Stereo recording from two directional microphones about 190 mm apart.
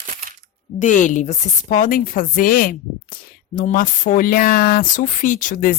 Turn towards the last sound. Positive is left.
turn(degrees=45)  # may be behind; listen again after turning